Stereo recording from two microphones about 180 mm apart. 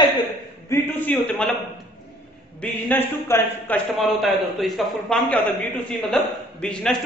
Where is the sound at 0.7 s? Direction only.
10° left (ahead or behind).